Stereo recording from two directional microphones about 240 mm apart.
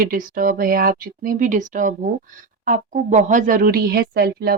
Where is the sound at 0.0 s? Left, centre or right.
Right.